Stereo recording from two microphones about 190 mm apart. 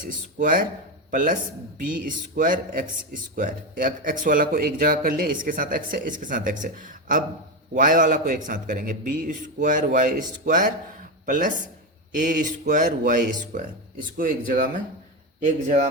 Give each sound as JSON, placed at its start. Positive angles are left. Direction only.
{"t": 0.0, "sound": "speech", "side_deg": -45}